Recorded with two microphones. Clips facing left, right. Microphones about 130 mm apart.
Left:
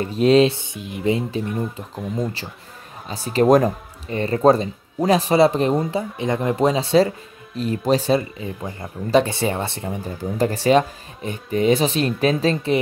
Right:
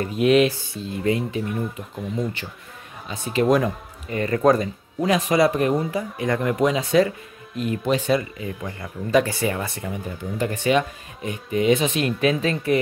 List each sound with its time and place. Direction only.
0.0 s speech: 30° left (ahead or behind)
0.7 s speech: 15° left (ahead or behind)
2.0 s speech: centre (ahead or behind)
3.3 s speech: 40° left (ahead or behind)